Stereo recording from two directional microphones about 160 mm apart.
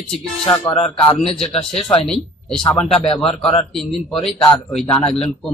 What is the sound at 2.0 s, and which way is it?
A man's voice, 5° left (ahead or behind).